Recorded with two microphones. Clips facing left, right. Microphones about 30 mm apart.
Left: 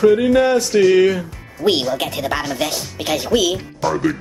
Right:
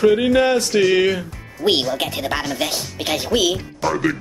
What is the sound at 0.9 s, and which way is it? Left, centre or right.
Speech, centre.